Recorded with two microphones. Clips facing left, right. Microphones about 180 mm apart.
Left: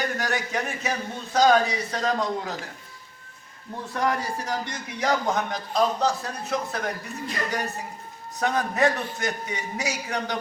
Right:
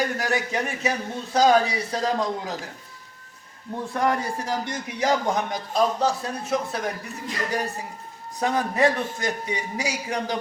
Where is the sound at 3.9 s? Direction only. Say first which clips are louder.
Right 2 dB; 25° right (ahead or behind).